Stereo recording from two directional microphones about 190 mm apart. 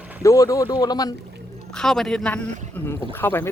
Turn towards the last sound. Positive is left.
turn(degrees=10)  # may be behind; listen again after turning